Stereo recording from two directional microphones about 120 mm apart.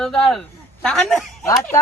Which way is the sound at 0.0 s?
5° left (ahead or behind).